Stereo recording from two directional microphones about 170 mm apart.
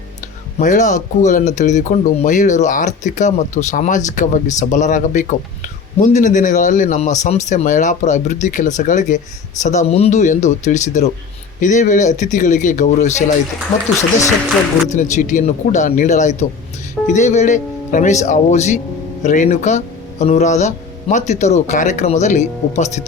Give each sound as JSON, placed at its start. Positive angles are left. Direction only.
{"t": 0.6, "sound": "speech", "side_deg": 45}
{"t": 14.9, "sound": "speech", "side_deg": 45}